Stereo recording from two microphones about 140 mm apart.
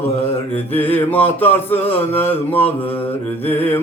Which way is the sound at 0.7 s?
15° left (ahead or behind).